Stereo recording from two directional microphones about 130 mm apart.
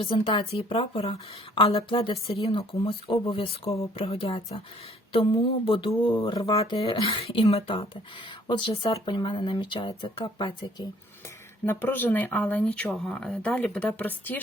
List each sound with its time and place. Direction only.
0.0 s speech: 40° left (ahead or behind)
6.6 s speech: 50° left (ahead or behind)
11.6 s speech: 15° left (ahead or behind)